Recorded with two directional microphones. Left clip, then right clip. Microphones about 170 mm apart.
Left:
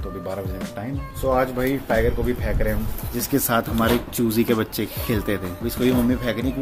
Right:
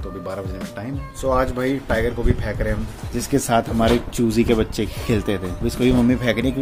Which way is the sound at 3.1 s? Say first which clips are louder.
Right 3 dB; 15° right (ahead or behind).